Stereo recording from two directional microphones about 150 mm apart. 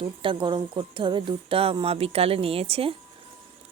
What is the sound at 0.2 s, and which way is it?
Speech, 35° right (ahead or behind).